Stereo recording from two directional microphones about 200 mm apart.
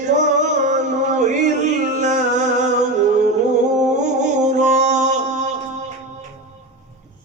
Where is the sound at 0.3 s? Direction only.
35° right (ahead or behind).